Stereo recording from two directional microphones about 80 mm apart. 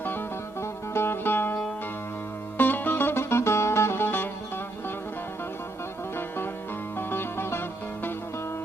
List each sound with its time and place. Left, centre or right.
0.6 s music: left
6.1 s music: left